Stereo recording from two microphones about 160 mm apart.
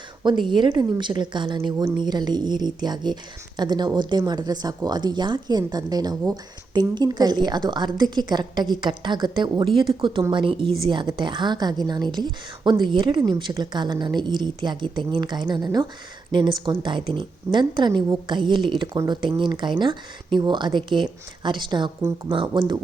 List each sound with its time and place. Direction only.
0.3 s a woman's voice: 30° right (ahead or behind)